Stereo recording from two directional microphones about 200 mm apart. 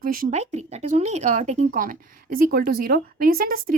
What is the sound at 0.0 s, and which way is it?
Speech, 45° right (ahead or behind).